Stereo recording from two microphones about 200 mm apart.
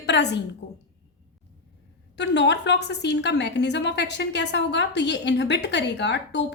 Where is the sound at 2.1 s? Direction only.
60° left (ahead or behind).